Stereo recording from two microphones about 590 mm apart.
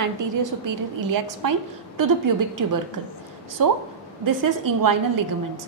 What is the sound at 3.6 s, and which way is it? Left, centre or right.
A woman's voice, right.